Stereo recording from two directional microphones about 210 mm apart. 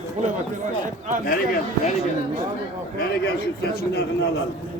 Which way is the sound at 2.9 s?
50° left (ahead or behind).